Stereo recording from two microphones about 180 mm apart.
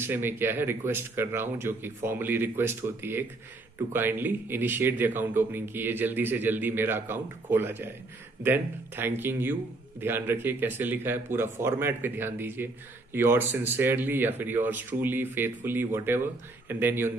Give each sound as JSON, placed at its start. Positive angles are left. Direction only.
{"t": 0.0, "sound": "speech", "side_deg": -10}